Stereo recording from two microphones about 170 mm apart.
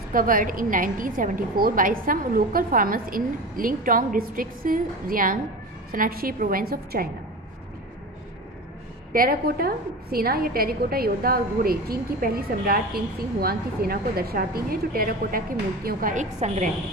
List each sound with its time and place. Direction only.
0.1 s a woman's voice: 55° right (ahead or behind)
9.1 s a woman's voice: 60° right (ahead or behind); by 16.7 s 45° right (ahead or behind)